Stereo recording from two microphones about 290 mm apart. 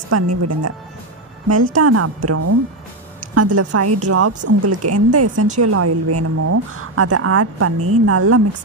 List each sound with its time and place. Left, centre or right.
0.1 s speech: right
1.7 s a woman's voice: right